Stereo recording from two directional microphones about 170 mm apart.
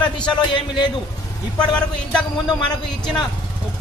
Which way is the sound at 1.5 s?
5° left (ahead or behind).